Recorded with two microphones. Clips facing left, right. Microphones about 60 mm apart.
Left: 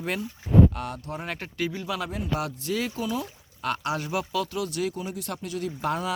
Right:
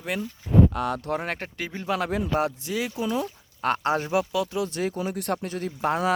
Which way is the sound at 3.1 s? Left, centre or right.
Right.